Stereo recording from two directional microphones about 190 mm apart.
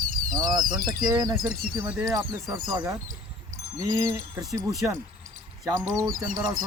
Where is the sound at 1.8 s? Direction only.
5° right (ahead or behind).